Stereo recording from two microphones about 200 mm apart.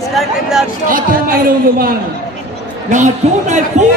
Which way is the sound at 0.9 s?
45° right (ahead or behind).